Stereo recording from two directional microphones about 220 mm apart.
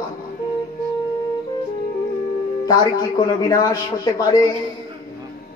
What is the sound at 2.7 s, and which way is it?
A man's voice, 20° left (ahead or behind).